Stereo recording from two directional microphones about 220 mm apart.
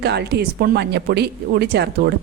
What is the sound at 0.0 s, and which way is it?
Speech, 50° right (ahead or behind).